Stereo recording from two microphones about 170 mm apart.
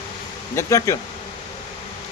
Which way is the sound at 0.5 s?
15° left (ahead or behind).